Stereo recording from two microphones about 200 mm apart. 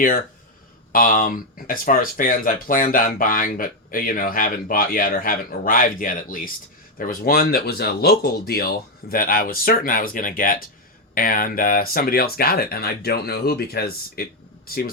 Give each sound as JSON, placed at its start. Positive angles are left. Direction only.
{"t": 0.9, "sound": "speech", "side_deg": 45}